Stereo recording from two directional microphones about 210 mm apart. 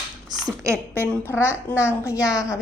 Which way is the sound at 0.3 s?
20° right (ahead or behind).